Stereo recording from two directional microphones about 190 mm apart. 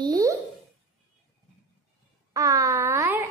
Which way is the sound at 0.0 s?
20° right (ahead or behind).